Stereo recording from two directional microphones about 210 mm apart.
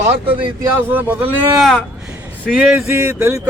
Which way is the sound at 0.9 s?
10° right (ahead or behind).